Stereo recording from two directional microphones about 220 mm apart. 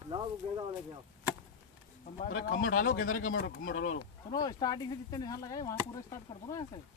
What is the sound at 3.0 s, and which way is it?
Speech, 70° left (ahead or behind).